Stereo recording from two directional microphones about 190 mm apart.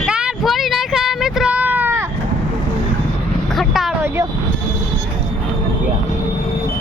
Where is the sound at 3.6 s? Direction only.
Centre (ahead or behind).